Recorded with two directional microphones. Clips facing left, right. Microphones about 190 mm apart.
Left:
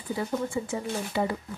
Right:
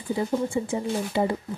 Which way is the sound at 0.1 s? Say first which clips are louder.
Right 4 dB; 25° right (ahead or behind).